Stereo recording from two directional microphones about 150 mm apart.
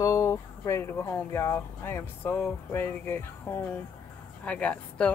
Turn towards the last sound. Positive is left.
turn(degrees=10)  # may be behind; listen again after turning